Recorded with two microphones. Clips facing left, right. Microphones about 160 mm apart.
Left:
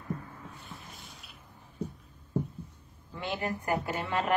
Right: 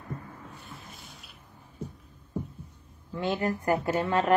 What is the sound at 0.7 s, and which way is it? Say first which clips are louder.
Sink: right 1 dB; centre (ahead or behind).